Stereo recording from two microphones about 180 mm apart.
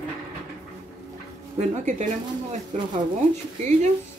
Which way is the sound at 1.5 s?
40° right (ahead or behind).